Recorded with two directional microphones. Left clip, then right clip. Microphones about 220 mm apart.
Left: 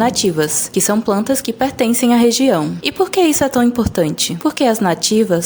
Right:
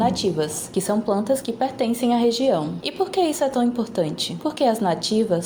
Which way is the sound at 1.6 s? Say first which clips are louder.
Left 7 dB; 85° left.